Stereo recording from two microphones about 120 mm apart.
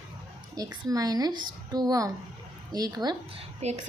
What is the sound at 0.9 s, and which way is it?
A woman's voice, 30° right (ahead or behind).